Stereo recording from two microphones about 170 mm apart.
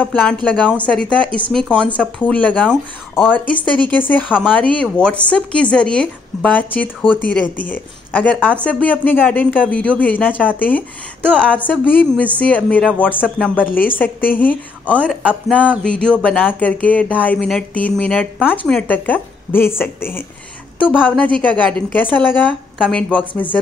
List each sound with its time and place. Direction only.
0.0 s speech: 10° left (ahead or behind)
21.4 s speech: 5° left (ahead or behind)